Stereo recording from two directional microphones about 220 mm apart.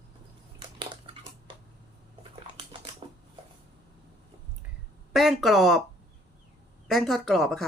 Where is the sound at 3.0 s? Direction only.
25° right (ahead or behind).